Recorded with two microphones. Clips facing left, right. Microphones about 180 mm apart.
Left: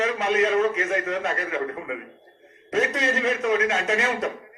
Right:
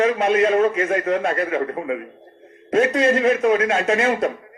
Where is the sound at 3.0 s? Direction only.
55° right (ahead or behind).